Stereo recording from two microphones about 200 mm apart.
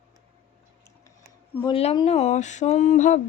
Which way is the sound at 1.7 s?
30° left (ahead or behind).